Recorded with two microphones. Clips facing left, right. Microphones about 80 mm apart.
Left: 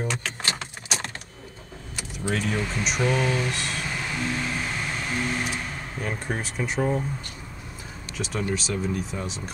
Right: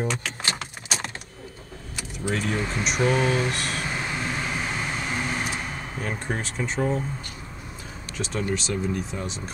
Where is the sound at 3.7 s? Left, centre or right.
Right.